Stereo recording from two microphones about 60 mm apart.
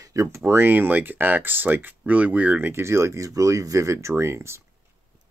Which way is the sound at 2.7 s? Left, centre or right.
Right.